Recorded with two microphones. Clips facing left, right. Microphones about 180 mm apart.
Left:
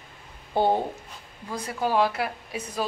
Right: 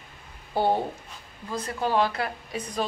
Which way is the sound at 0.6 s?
20° left (ahead or behind).